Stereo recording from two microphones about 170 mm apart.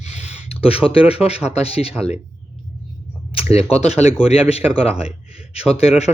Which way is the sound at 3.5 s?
35° left (ahead or behind).